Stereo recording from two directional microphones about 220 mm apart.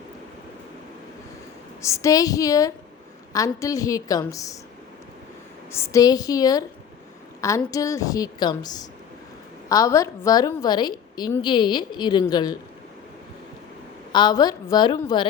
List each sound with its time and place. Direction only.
1.8 s a woman's voice: 15° left (ahead or behind)
5.7 s a woman's voice: 15° left (ahead or behind)
14.1 s a woman's voice: 20° left (ahead or behind)